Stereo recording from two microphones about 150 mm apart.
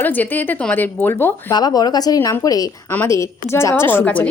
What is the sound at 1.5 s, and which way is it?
A woman's voice, 25° left (ahead or behind).